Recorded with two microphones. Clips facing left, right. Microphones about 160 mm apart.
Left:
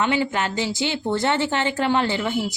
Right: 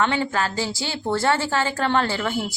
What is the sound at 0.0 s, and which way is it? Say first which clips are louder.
Speech: even; 15° left (ahead or behind).